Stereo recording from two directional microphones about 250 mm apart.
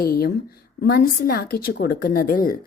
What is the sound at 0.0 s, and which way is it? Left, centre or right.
A woman's voice, left.